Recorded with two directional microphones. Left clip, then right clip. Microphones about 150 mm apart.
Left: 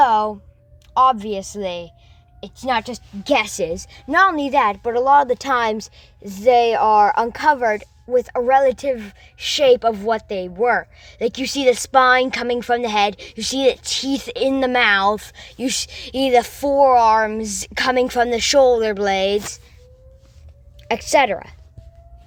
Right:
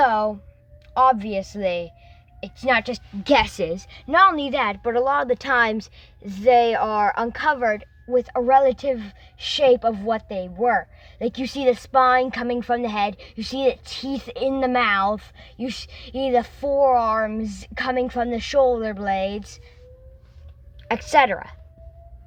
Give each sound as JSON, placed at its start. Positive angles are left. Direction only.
{"t": 0.0, "sound": "a sound", "side_deg": 5}
{"t": 1.2, "sound": "a woman's voice", "side_deg": 5}
{"t": 3.3, "sound": "a woman's voice", "side_deg": 15}
{"t": 8.1, "sound": "a woman's voice", "side_deg": 45}
{"t": 20.8, "sound": "a woman's voice", "side_deg": 30}